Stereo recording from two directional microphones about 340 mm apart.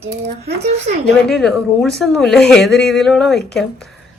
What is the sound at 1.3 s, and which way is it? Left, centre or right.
Speech, centre.